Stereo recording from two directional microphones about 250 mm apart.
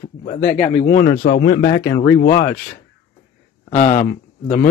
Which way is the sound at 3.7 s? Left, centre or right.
Left.